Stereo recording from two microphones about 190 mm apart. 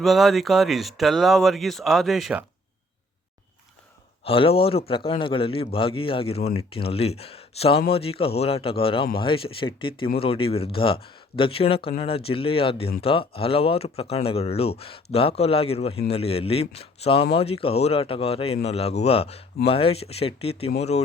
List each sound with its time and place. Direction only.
0.0 s speech: centre (ahead or behind)
4.2 s a man's voice: 30° left (ahead or behind)